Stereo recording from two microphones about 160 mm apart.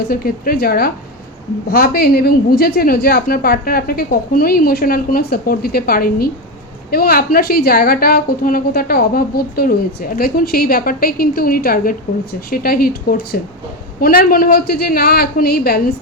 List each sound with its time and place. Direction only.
0.1 s a woman's voice: 65° left (ahead or behind)